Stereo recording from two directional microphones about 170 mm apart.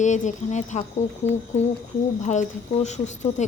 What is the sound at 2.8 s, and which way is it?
Speech, 45° left (ahead or behind).